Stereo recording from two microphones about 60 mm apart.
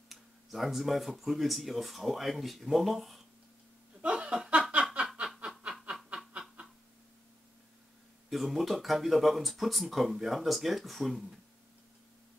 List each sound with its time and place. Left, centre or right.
0.1 s speech: centre
4.0 s chuckle: centre
5.2 s snicker: centre
8.3 s speech: centre